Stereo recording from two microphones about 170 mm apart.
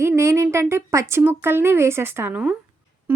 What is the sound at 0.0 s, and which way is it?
A woman's voice, 15° right (ahead or behind).